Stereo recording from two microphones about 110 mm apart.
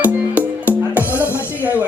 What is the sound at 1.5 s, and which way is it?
Speech, 15° right (ahead or behind).